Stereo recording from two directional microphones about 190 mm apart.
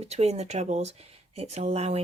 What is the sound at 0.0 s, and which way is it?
Speech, 35° right (ahead or behind).